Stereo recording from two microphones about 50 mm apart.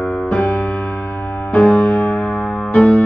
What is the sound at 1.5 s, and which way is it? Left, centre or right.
Music, left.